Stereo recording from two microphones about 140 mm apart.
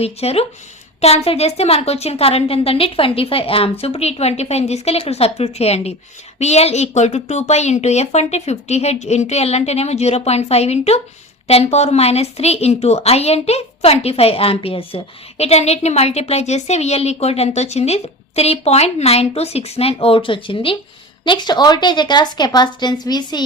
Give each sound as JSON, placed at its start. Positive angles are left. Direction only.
{"t": 0.0, "sound": "a woman's voice", "side_deg": 45}